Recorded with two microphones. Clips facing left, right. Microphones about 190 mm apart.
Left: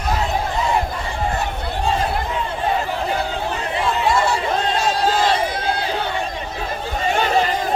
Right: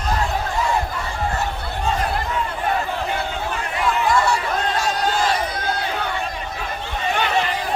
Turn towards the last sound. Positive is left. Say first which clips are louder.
# left 3 dB
turn(degrees=40)  # may be behind; listen again after turning